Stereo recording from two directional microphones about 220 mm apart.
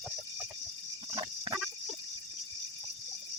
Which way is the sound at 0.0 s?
Centre (ahead or behind).